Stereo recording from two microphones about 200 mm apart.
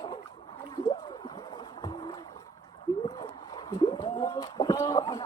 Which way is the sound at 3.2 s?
20° left (ahead or behind).